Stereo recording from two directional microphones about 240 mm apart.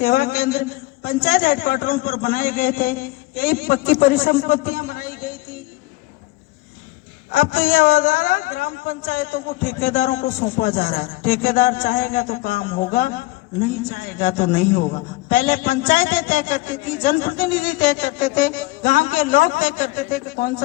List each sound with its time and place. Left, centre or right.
0.0 s a man's voice: left
7.3 s a man's voice: left